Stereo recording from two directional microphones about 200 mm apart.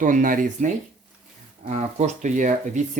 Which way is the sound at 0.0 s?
40° right (ahead or behind).